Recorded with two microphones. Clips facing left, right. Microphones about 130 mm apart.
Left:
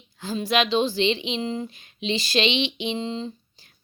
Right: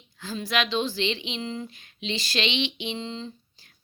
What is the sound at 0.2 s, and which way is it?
Speech, 20° left (ahead or behind).